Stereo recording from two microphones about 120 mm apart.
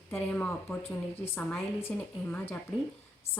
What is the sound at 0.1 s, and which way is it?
Speech, 10° left (ahead or behind).